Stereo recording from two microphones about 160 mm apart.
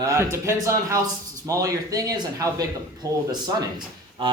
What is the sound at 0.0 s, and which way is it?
Speech, 20° right (ahead or behind).